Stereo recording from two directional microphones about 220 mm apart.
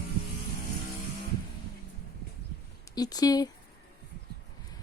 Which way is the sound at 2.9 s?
15° left (ahead or behind).